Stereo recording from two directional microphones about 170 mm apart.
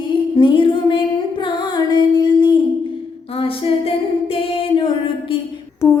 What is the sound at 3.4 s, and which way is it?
A capella, 35° left (ahead or behind).